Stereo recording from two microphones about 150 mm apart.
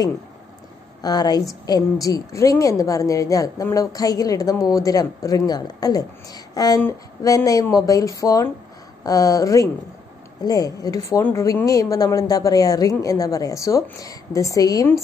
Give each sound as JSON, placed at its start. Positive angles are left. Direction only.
{"t": 1.0, "sound": "a woman's voice", "side_deg": 25}